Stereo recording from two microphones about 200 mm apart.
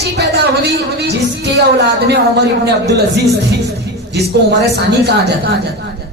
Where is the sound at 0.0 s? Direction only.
55° right (ahead or behind).